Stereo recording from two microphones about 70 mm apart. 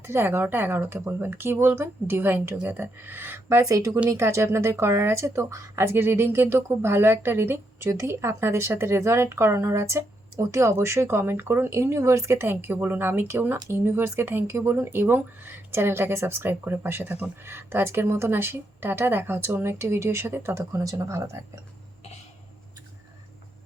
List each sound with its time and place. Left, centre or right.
0.0 s speech: right
3.6 s speech: right
4.1 s speech: right
7.9 s speech: right